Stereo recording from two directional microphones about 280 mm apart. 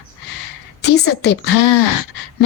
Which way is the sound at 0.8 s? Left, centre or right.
Left.